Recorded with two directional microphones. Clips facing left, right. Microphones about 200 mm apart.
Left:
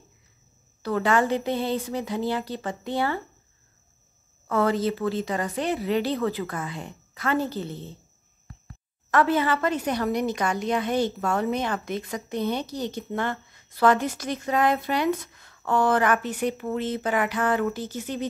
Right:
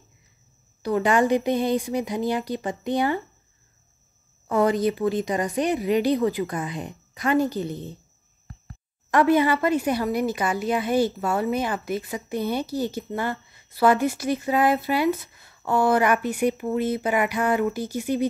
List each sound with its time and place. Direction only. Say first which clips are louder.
0.8 s a woman's voice: right 2 dB; 15° right (ahead or behind)
4.5 s a woman's voice: right 2 dB; 15° right (ahead or behind)
9.1 s a woman's voice: right 3 dB; 15° right (ahead or behind)